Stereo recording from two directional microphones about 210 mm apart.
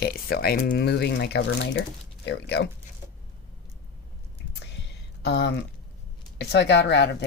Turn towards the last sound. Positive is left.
turn(degrees=55)  # may be behind; listen again after turning